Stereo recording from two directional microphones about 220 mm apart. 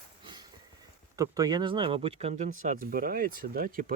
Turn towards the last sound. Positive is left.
turn(degrees=-40)  # may be behind; listen again after turning